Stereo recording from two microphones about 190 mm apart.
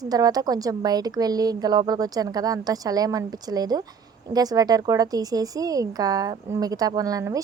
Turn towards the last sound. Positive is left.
turn(degrees=-20)  # may be behind; listen again after turning